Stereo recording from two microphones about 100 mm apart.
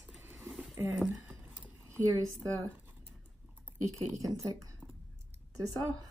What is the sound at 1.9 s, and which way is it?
Speech, 30° right (ahead or behind).